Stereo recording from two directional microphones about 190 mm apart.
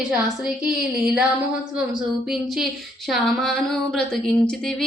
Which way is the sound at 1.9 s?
Centre (ahead or behind).